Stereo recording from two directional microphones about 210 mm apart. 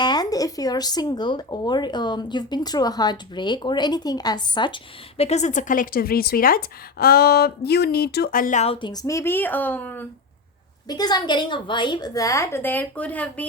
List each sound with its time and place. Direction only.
0.0 s speech: 20° left (ahead or behind)
10.8 s a woman's voice: 20° left (ahead or behind)